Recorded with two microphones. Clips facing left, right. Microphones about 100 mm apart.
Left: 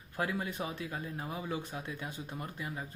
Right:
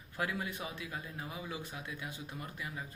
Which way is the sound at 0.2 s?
30° left (ahead or behind).